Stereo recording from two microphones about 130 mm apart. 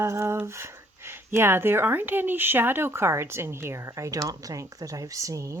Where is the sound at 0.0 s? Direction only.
20° right (ahead or behind).